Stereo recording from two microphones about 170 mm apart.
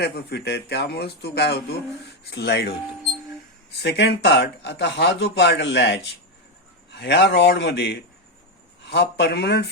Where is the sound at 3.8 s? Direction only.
80° left.